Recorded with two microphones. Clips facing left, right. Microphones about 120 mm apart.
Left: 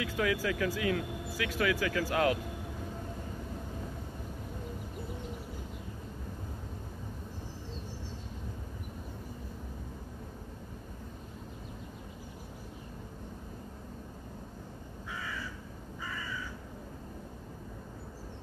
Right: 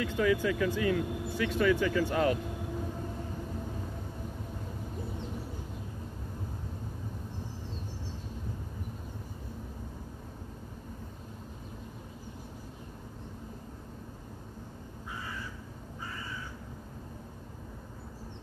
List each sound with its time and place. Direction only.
0.0 s speech: 5° left (ahead or behind)
15.0 s crow: 90° left